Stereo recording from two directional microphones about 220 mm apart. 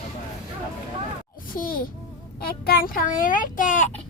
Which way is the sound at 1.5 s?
40° left (ahead or behind).